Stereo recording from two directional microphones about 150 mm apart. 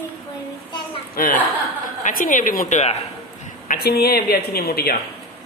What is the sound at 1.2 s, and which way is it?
A woman's voice, 70° left (ahead or behind).